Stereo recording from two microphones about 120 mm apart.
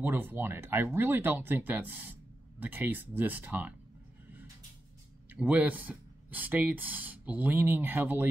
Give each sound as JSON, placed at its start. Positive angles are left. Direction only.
{"t": 0.0, "sound": "speech", "side_deg": -15}
{"t": 5.3, "sound": "speech", "side_deg": -10}